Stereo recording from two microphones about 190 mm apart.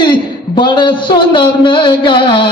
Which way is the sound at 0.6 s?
25° left (ahead or behind).